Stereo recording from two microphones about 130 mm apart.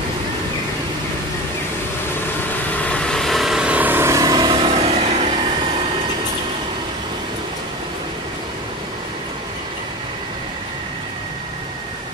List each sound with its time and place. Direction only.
2.7 s vehicle: 10° left (ahead or behind); by 4.5 s 25° right (ahead or behind)
4.5 s vehicle: 40° right (ahead or behind)